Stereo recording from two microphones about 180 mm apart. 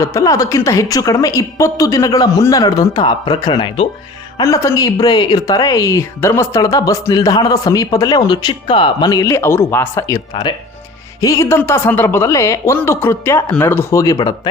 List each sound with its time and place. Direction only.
0.0 s speech: 15° left (ahead or behind)